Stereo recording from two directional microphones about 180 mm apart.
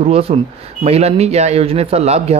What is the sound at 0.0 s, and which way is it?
A man's voice, 35° right (ahead or behind).